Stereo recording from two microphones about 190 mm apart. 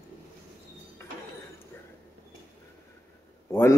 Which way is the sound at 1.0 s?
15° left (ahead or behind).